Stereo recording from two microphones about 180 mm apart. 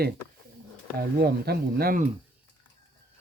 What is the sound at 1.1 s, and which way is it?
Speech, 60° right (ahead or behind).